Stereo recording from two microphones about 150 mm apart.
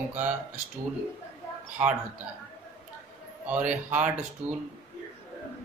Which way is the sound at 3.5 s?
55° right (ahead or behind).